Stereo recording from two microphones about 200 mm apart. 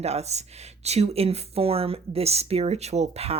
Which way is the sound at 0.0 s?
30° right (ahead or behind).